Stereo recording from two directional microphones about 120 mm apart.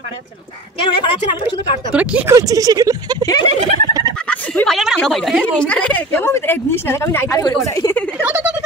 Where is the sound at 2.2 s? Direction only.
30° right (ahead or behind).